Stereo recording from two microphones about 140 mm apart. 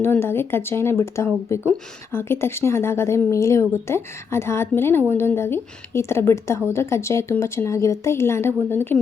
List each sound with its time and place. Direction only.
0.0 s a woman's voice: 15° left (ahead or behind)